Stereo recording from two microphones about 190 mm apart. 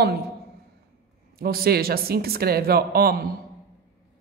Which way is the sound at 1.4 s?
55° right (ahead or behind).